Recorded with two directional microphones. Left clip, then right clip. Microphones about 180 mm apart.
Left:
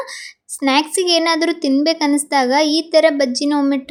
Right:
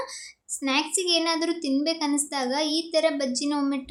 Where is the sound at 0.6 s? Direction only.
40° left (ahead or behind).